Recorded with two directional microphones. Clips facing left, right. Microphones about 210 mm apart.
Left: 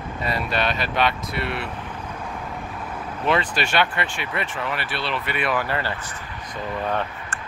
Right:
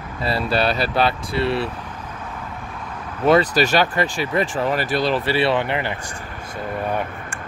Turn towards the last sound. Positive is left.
turn(degrees=-10)  # may be behind; listen again after turning